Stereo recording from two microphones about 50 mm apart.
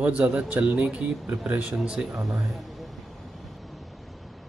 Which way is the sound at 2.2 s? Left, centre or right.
Centre.